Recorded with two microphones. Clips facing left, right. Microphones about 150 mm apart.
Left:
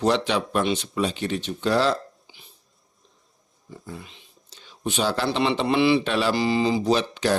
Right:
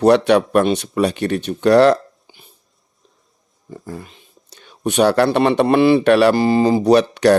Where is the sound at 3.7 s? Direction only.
50° right (ahead or behind).